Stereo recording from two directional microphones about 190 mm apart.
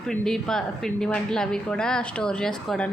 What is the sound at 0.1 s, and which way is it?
Speech, 5° left (ahead or behind).